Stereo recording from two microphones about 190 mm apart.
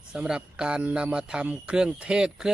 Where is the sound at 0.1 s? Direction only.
5° right (ahead or behind).